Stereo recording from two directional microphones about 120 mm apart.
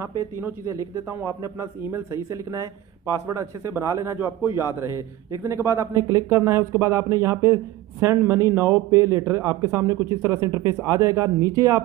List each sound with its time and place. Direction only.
0.2 s a man's voice: 20° right (ahead or behind)